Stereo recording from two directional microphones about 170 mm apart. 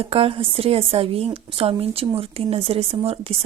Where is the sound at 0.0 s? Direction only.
35° right (ahead or behind).